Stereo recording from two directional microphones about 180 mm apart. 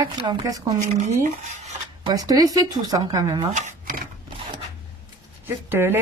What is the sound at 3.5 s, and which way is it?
Speech, 45° right (ahead or behind).